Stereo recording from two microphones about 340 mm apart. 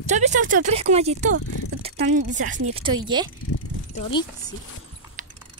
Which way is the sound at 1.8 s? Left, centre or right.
Right.